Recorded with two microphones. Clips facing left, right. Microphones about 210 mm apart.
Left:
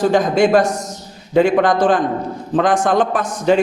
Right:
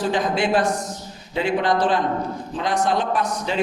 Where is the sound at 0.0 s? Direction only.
45° left (ahead or behind).